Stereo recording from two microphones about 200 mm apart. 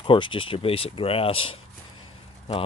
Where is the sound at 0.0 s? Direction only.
25° left (ahead or behind).